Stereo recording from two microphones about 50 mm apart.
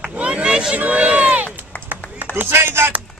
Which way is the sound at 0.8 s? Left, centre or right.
Right.